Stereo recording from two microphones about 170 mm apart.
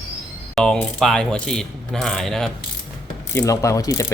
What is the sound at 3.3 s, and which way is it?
Ratchet, 15° left (ahead or behind).